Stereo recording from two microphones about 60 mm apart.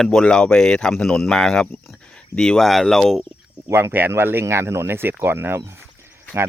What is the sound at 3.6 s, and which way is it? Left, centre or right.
Speech, right.